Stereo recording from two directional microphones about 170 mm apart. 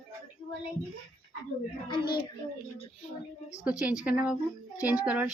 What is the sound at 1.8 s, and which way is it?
Speech, 25° left (ahead or behind).